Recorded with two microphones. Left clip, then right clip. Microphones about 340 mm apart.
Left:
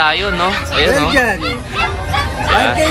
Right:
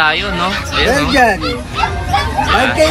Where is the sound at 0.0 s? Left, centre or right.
Centre.